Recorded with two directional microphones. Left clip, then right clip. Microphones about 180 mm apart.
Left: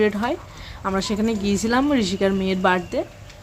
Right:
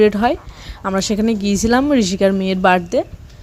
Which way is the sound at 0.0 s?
45° right (ahead or behind).